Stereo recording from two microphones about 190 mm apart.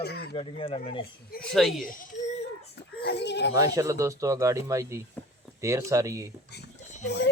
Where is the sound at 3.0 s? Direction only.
65° left (ahead or behind).